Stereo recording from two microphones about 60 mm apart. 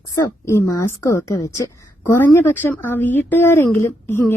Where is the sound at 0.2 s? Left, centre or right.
Left.